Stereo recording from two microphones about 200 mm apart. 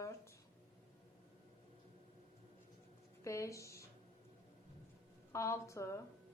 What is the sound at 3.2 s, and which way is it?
Speech, 15° left (ahead or behind).